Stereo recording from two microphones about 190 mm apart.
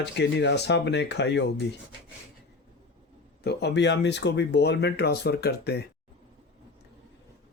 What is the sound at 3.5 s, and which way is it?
Speech, 65° left (ahead or behind).